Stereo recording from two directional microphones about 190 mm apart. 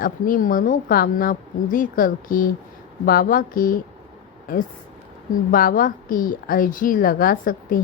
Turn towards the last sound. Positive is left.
turn(degrees=50)  # may be behind; listen again after turning